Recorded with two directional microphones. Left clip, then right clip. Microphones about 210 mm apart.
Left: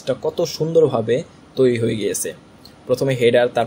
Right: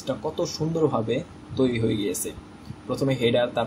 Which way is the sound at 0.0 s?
45° left (ahead or behind).